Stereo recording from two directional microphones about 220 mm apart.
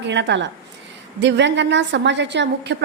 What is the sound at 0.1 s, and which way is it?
A woman's voice, 55° right (ahead or behind).